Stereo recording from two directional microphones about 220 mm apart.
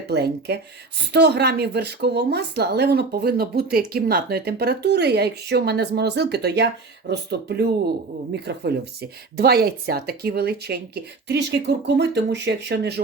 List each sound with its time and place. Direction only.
0.1 s speech: 50° right (ahead or behind)